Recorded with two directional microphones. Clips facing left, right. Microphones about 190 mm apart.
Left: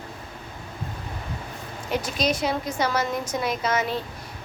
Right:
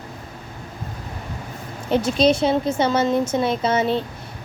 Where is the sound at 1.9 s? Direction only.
30° right (ahead or behind).